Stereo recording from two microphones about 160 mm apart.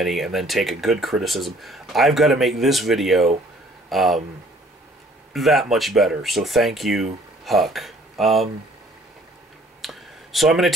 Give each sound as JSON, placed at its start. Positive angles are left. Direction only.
{"t": 0.0, "sound": "speech", "side_deg": 0}
{"t": 5.3, "sound": "speech", "side_deg": 0}
{"t": 9.8, "sound": "a sound", "side_deg": 0}